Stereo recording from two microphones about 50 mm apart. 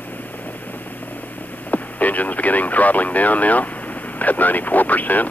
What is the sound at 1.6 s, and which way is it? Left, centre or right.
Radio, left.